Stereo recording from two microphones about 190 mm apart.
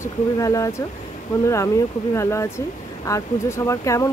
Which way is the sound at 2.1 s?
15° left (ahead or behind).